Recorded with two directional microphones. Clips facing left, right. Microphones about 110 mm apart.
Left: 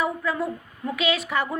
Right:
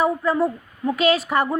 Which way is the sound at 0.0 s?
35° right (ahead or behind).